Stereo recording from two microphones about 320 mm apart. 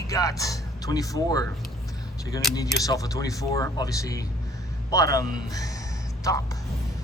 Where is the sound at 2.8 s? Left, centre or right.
Centre.